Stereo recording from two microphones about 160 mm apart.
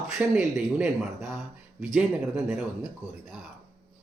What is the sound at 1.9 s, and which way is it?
Speech, 5° right (ahead or behind).